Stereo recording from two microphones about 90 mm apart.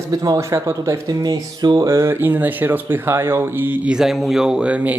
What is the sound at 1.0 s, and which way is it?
Music, 45° right (ahead or behind).